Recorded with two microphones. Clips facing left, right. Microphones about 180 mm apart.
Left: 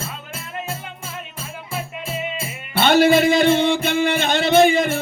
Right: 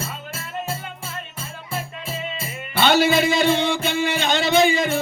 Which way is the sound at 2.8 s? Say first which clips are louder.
Left 3 dB; 55° left (ahead or behind).